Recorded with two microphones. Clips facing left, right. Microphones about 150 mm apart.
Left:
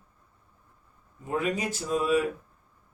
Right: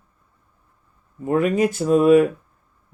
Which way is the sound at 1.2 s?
55° right (ahead or behind).